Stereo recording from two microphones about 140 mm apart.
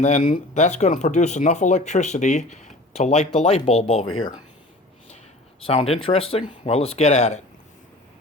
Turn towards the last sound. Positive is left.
turn(degrees=55)  # may be behind; listen again after turning